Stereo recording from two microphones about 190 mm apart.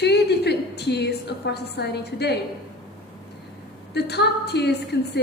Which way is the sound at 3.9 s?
60° left (ahead or behind).